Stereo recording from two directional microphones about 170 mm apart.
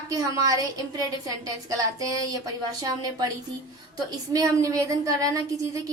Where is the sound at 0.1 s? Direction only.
20° right (ahead or behind).